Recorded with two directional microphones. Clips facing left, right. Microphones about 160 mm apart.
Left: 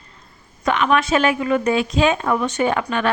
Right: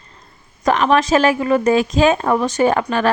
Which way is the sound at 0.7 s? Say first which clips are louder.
Right 3 dB; 35° right (ahead or behind).